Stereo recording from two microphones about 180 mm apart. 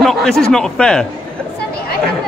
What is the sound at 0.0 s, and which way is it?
A man's voice, centre (ahead or behind).